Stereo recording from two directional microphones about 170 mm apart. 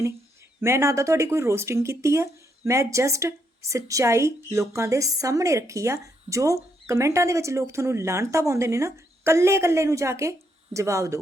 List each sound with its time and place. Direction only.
0.6 s speech: 15° right (ahead or behind)